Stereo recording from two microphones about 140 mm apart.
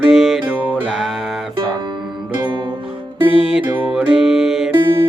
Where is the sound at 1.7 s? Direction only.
35° right (ahead or behind).